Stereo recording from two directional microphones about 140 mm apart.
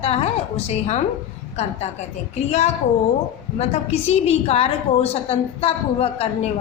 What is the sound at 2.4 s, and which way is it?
A woman's voice, 50° left (ahead or behind).